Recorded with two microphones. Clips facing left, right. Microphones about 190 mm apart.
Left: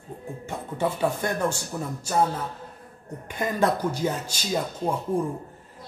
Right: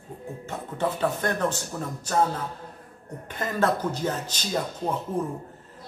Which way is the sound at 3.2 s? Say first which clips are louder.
Left 1 dB; 15° left (ahead or behind).